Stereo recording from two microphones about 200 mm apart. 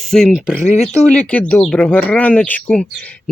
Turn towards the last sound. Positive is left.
turn(degrees=5)  # may be behind; listen again after turning